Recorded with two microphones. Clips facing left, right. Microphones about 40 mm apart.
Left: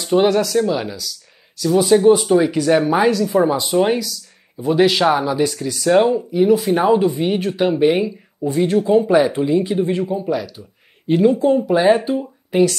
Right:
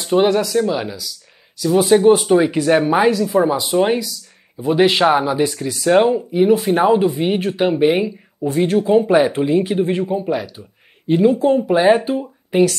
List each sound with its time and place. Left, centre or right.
0.0 s speech: centre
1.8 s speech: right
3.3 s speech: centre; by 10.6 s right
11.1 s speech: centre